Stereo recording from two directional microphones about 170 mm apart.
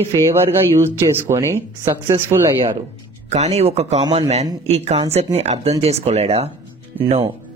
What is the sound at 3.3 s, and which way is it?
A man's voice, 40° right (ahead or behind).